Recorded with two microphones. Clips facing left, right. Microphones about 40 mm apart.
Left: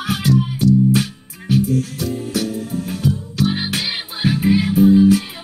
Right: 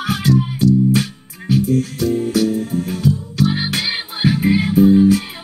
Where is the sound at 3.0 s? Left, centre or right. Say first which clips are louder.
Right 1 dB; left.